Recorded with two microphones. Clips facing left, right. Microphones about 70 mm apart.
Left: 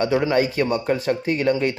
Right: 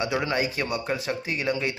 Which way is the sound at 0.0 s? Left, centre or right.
Left.